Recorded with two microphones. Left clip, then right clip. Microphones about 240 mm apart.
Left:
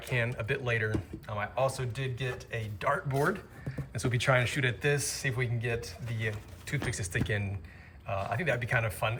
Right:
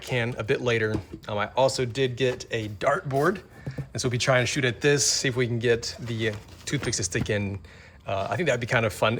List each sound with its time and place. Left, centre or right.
0.0 s speech: centre